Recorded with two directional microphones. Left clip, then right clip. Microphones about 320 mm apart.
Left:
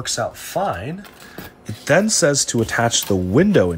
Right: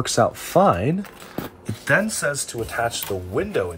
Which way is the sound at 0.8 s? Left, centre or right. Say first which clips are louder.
Right 6 dB; centre.